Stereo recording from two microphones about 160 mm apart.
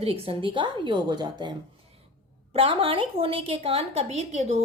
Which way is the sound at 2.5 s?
35° right (ahead or behind).